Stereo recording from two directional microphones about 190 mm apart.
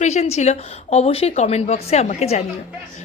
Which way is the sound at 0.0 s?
35° left (ahead or behind).